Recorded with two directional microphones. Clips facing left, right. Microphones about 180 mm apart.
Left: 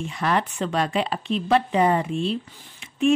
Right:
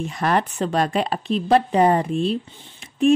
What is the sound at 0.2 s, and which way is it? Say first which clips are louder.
A woman's voice: right 2 dB; 45° right (ahead or behind).